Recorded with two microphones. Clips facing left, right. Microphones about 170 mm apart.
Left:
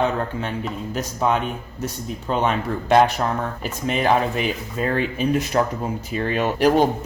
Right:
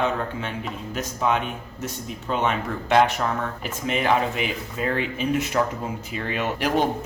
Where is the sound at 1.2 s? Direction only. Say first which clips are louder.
Left 2 dB; 40° left (ahead or behind).